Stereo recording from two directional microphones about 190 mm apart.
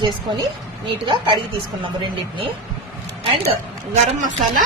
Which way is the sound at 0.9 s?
25° right (ahead or behind).